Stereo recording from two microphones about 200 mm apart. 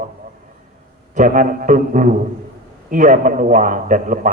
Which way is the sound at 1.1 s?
40° right (ahead or behind).